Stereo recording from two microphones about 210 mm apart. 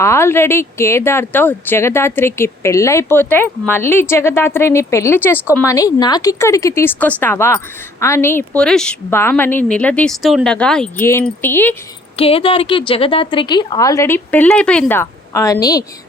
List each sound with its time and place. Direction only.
0.0 s speech: 10° left (ahead or behind)
12.1 s speech: 25° left (ahead or behind)